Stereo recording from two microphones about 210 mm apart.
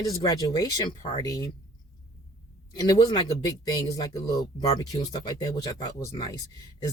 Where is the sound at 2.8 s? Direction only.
15° left (ahead or behind).